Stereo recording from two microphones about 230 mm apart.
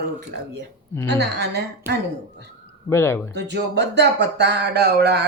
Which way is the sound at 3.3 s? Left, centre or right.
Right.